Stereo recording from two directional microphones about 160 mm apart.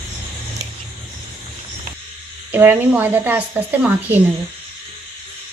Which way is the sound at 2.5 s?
10° right (ahead or behind).